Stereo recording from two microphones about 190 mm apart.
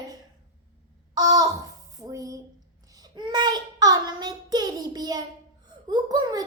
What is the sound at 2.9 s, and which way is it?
Child singing, 20° right (ahead or behind).